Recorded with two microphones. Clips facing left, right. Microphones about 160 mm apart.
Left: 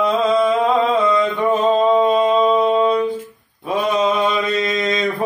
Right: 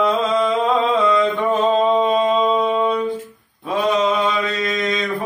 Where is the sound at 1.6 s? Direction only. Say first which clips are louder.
Left 2 dB; 5° left (ahead or behind).